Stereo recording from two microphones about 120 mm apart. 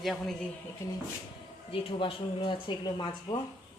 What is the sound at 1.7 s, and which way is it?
Speech, 45° left (ahead or behind).